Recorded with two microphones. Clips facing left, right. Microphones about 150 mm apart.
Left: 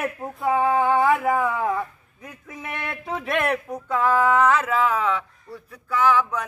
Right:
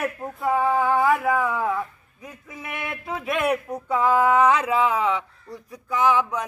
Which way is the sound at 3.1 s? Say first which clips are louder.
Even; 5° right (ahead or behind).